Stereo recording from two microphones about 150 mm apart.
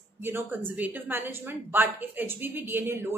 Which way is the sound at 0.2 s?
15° right (ahead or behind).